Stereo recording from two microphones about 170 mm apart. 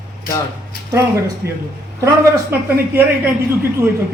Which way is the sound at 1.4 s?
70° right (ahead or behind).